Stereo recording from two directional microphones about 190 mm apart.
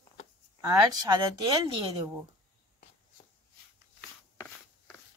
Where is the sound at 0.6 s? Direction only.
20° right (ahead or behind).